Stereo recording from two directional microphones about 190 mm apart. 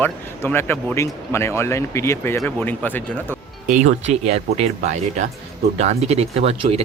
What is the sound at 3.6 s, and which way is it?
Speech, 40° right (ahead or behind).